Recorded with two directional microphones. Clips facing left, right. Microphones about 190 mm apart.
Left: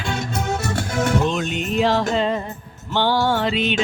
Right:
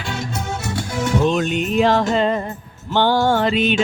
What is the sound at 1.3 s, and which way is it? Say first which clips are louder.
Music: right 4 dB; 50° right (ahead or behind).